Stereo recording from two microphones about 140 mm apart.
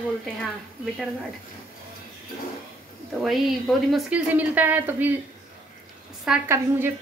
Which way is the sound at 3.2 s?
Centre (ahead or behind).